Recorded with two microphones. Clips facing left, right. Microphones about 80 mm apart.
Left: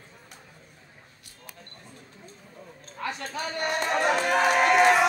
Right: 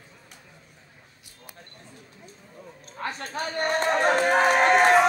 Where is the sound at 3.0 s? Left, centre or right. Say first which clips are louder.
Right 1 dB; right.